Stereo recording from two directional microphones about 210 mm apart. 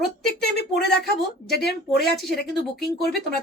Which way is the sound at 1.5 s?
50° left (ahead or behind).